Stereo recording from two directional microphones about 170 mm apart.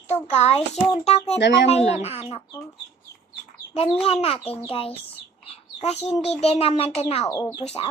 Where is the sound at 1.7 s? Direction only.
40° left (ahead or behind).